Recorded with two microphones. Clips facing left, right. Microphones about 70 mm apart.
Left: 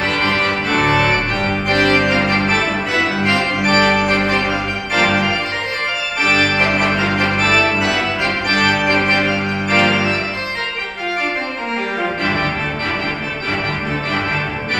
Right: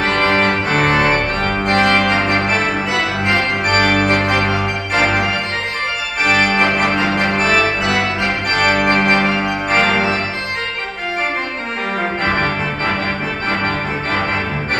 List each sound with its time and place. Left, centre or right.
0.0 s organ: right
6.2 s organ: right